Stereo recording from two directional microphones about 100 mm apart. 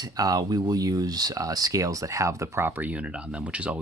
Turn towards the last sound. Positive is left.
turn(degrees=-10)  # may be behind; listen again after turning